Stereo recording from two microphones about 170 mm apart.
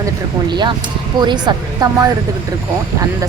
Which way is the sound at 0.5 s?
25° right (ahead or behind).